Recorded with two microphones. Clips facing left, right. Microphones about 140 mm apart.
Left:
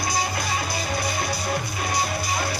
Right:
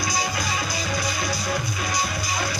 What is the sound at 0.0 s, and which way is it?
Music, 55° left (ahead or behind).